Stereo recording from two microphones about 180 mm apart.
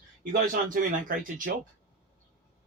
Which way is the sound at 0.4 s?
50° right (ahead or behind).